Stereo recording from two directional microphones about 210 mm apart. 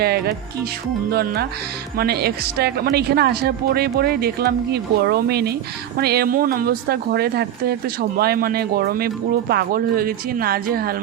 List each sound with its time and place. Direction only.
0.0 s a woman's voice: 50° right (ahead or behind)